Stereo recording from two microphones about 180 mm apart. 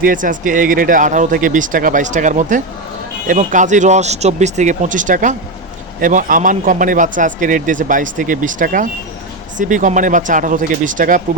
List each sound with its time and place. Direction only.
0.0 s a man's voice: 50° right (ahead or behind)